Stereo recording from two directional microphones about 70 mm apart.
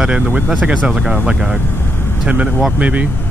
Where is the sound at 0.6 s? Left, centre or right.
Centre.